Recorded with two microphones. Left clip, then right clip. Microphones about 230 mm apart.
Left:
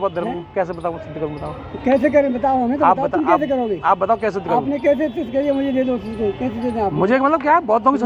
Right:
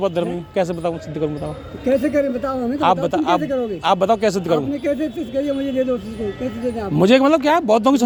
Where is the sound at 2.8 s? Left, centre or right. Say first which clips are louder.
Right 1 dB; right.